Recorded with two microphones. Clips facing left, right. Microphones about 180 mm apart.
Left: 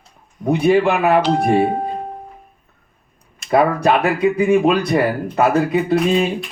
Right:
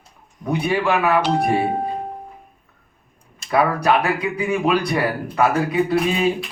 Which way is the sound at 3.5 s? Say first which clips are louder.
Left 3 dB; 25° left (ahead or behind).